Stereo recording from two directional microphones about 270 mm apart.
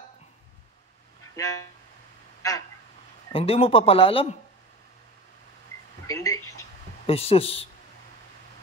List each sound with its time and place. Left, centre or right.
1.3 s vehicle: centre
3.3 s speech: left
6.0 s a sound: centre
7.1 s speech: left